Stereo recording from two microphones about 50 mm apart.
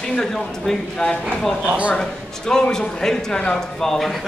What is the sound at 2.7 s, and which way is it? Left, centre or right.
Speech, centre.